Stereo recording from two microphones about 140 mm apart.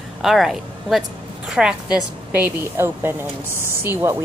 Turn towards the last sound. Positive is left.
turn(degrees=-20)  # may be behind; listen again after turning